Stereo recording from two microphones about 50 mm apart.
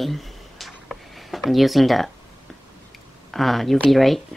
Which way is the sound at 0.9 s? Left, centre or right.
Centre.